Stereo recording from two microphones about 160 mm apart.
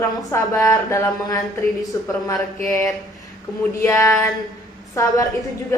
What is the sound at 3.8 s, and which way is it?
Speech, 20° left (ahead or behind).